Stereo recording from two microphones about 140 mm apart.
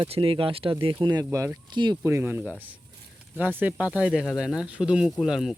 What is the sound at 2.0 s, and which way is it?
Speech, 20° right (ahead or behind).